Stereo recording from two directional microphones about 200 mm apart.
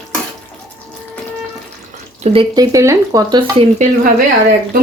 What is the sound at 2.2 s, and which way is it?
Speech, 25° right (ahead or behind).